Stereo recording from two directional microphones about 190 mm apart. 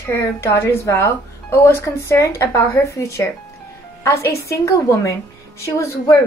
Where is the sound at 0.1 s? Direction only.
15° left (ahead or behind).